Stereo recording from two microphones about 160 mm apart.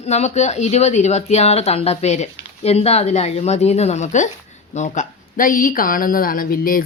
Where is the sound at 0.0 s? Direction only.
45° left (ahead or behind).